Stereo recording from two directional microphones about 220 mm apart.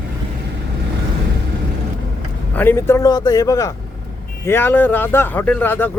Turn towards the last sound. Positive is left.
turn(degrees=10)  # may be behind; listen again after turning